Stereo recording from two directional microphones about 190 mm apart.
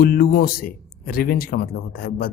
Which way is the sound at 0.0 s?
50° left (ahead or behind).